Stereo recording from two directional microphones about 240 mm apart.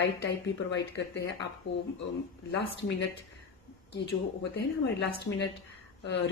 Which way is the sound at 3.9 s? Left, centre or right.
Left.